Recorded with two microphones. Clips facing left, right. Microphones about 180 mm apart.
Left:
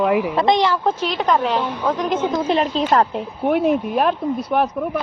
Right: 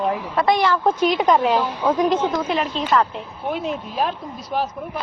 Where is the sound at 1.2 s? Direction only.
10° right (ahead or behind).